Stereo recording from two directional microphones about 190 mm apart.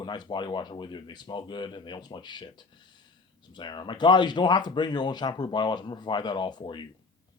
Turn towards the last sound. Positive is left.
turn(degrees=25)  # may be behind; listen again after turning